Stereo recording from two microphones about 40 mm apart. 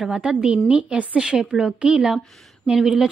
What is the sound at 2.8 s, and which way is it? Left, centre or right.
Speech, centre.